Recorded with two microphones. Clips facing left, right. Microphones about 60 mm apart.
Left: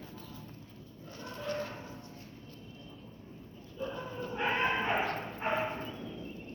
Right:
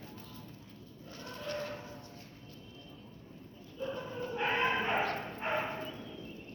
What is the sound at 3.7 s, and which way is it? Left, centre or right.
Dog, left.